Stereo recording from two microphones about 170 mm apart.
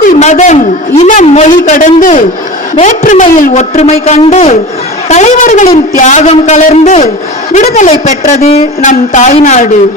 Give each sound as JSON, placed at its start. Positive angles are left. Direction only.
{"t": 0.1, "sound": "a woman's voice", "side_deg": 45}